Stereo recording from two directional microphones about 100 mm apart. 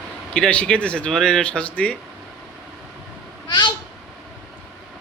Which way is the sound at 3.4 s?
50° left (ahead or behind).